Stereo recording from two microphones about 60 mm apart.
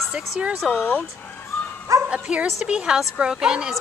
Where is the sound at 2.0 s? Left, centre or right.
Centre.